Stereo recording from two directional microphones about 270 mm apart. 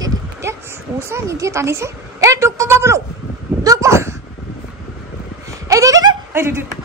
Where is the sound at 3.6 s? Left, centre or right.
Centre.